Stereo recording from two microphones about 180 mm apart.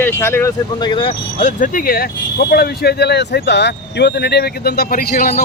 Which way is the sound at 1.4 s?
50° left (ahead or behind).